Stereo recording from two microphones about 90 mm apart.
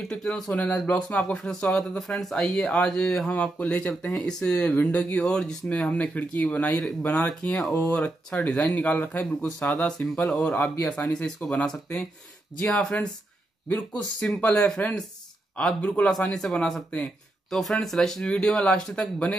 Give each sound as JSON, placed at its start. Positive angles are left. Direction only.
{"t": 0.1, "sound": "speech", "side_deg": 5}
{"t": 8.7, "sound": "speech", "side_deg": 15}